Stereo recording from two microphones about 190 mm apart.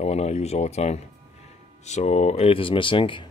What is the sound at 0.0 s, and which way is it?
Speech, 35° left (ahead or behind).